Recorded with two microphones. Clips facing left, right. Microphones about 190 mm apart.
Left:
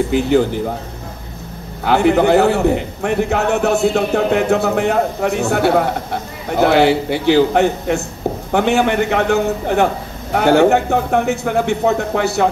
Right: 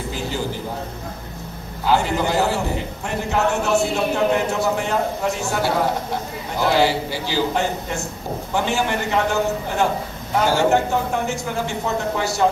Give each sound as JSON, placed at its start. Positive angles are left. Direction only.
{"t": 0.1, "sound": "a man's voice", "side_deg": 60}
{"t": 1.9, "sound": "a man's voice", "side_deg": 60}